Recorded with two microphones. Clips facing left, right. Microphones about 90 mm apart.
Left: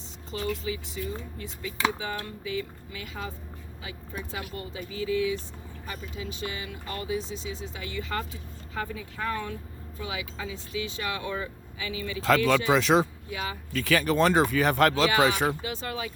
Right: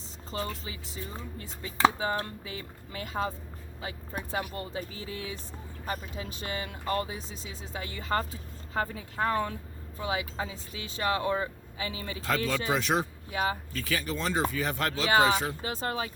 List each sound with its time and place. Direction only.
0.3 s speech: 35° right (ahead or behind)
12.5 s speech: 90° left
13.3 s speech: 40° right (ahead or behind)
13.8 s speech: 70° left (ahead or behind)
15.6 s speech: 40° right (ahead or behind)